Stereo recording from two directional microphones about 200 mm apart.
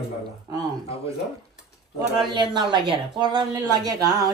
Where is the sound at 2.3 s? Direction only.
25° right (ahead or behind).